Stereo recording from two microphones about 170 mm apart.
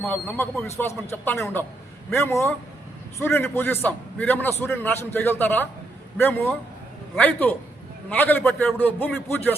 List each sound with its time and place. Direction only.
0.0 s a man's voice: 10° left (ahead or behind)
7.2 s a man's voice: 10° left (ahead or behind)